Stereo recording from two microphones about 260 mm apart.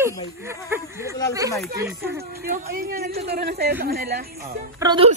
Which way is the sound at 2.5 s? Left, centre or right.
Right.